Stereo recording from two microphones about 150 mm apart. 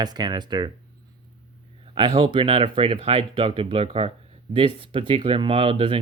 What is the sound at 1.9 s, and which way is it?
Speech, 35° right (ahead or behind).